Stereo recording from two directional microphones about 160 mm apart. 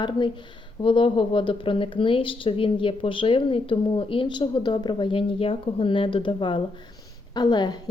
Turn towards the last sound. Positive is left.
turn(degrees=25)  # may be behind; listen again after turning